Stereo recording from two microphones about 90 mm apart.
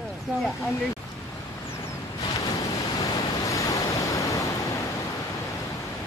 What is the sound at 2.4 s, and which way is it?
Waves, 40° left (ahead or behind).